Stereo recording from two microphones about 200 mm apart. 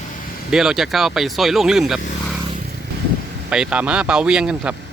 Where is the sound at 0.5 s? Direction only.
Centre (ahead or behind).